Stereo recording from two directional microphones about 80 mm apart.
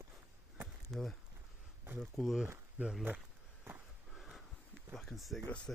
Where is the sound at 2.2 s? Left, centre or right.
Centre.